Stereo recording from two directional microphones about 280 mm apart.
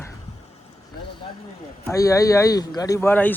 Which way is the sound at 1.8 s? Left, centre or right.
Centre.